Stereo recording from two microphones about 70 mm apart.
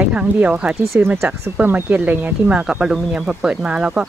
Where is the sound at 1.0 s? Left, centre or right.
Right.